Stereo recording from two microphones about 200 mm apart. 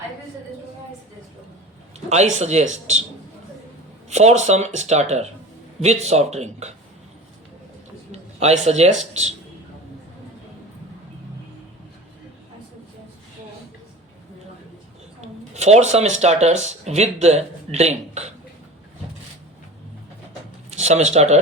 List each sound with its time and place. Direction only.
2.0 s a man's voice: 35° right (ahead or behind)
4.1 s a man's voice: 35° right (ahead or behind)
8.4 s a man's voice: 35° right (ahead or behind)
15.5 s a man's voice: 35° right (ahead or behind)
20.8 s a man's voice: 35° right (ahead or behind)